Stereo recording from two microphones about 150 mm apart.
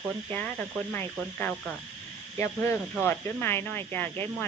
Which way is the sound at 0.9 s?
15° left (ahead or behind).